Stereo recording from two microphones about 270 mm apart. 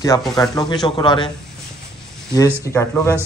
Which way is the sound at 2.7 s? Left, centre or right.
Centre.